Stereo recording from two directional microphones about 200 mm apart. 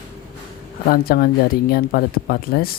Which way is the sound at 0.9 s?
50° left (ahead or behind).